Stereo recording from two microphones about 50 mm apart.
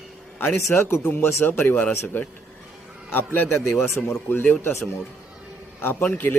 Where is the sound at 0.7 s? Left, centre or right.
Left.